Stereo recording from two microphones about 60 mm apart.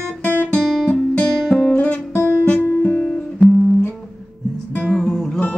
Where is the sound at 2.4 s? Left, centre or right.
Left.